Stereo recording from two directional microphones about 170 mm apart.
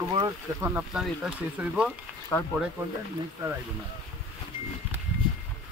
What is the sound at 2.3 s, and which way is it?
Speech, 15° left (ahead or behind).